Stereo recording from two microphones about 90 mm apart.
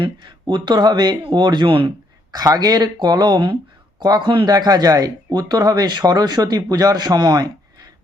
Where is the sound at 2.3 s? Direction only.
45° right (ahead or behind); by 4.5 s 60° right (ahead or behind).